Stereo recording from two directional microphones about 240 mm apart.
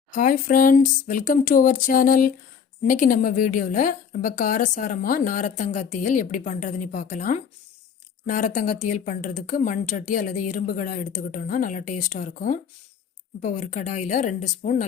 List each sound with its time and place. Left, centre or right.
0.1 s speech: left